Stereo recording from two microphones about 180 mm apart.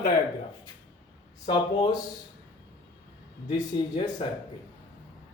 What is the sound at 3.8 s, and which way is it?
Speech, 25° left (ahead or behind).